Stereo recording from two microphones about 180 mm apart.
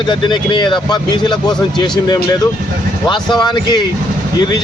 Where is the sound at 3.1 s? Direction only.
25° left (ahead or behind).